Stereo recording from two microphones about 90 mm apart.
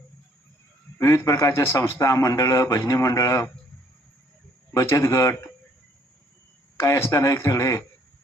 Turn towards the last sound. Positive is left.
turn(degrees=35)  # may be behind; listen again after turning